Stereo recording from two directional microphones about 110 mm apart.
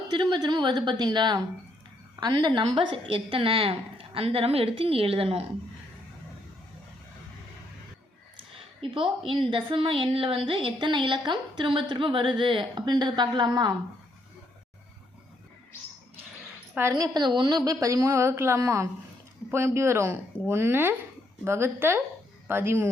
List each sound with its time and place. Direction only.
0.2 s a woman's voice: 40° right (ahead or behind); by 5.4 s 60° right (ahead or behind)
8.8 s a woman's voice: 55° right (ahead or behind); by 13.7 s 40° right (ahead or behind)
16.9 s a woman's voice: 40° right (ahead or behind); by 22.9 s 20° right (ahead or behind)